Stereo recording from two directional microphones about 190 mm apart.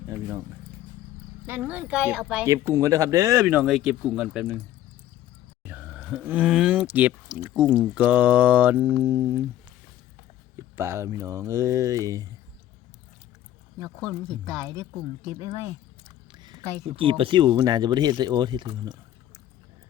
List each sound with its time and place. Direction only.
0.1 s a sound: 15° right (ahead or behind)
1.5 s speech: 10° right (ahead or behind)
2.5 s speech: 15° right (ahead or behind)
5.6 s speech: 10° right (ahead or behind)
10.8 s speech: 15° right (ahead or behind)
14.3 s speech: 20° right (ahead or behind)
16.3 s speech: 25° right (ahead or behind)